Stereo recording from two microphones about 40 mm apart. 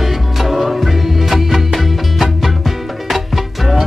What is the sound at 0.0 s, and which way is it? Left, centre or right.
Music, centre.